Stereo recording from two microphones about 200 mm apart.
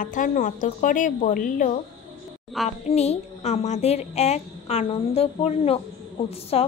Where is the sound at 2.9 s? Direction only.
30° left (ahead or behind).